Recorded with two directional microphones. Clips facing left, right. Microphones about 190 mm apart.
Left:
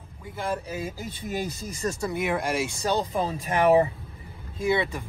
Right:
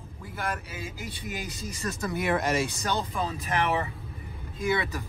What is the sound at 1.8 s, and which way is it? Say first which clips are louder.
Speech: left 5 dB; 30° left (ahead or behind).